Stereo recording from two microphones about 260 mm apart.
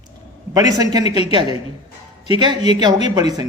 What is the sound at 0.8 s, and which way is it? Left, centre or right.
Speech, centre.